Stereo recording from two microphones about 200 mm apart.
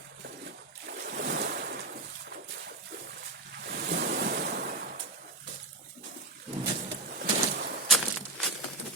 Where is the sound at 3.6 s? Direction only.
55° right (ahead or behind).